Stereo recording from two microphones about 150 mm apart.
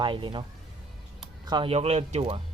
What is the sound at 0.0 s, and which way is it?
Speech, 35° right (ahead or behind).